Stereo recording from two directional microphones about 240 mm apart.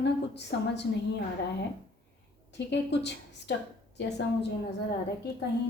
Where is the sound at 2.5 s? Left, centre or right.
Left.